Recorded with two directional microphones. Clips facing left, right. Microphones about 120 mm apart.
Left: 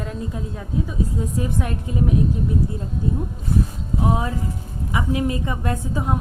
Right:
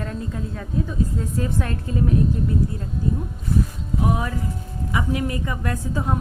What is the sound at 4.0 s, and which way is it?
A woman's voice, 25° left (ahead or behind).